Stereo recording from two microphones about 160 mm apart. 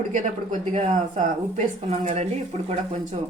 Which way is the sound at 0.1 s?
55° right (ahead or behind).